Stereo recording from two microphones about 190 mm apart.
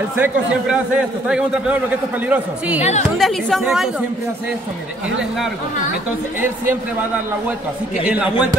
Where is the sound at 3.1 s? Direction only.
Centre (ahead or behind).